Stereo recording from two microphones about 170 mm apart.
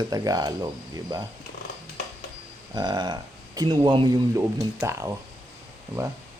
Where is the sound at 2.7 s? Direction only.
25° right (ahead or behind).